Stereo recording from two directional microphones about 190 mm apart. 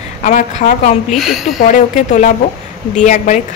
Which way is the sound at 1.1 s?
Centre (ahead or behind).